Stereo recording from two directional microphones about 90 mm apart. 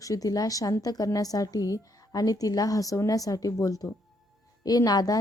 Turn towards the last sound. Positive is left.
turn(degrees=45)  # may be behind; listen again after turning